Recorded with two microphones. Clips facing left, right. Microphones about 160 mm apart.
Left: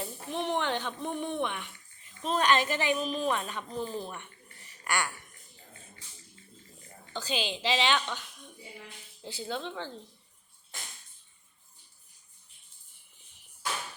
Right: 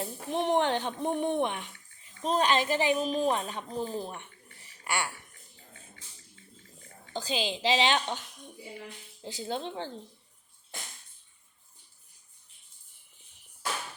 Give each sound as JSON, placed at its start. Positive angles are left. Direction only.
{"t": 0.0, "sound": "a woman's voice", "side_deg": -45}
{"t": 7.1, "sound": "a woman's voice", "side_deg": -40}
{"t": 9.2, "sound": "a woman's voice", "side_deg": -40}